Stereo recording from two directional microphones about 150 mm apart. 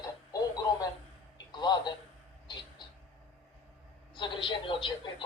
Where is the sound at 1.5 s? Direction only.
30° left (ahead or behind).